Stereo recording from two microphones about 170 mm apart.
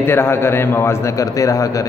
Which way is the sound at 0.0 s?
15° left (ahead or behind).